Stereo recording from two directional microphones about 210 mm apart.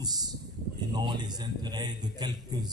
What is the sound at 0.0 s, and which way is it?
A man's voice, 20° right (ahead or behind).